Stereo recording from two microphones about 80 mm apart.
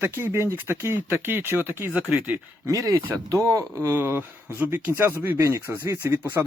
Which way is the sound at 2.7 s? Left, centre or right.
Right.